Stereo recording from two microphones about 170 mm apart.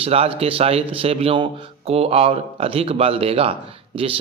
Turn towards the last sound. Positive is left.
turn(degrees=-30)  # may be behind; listen again after turning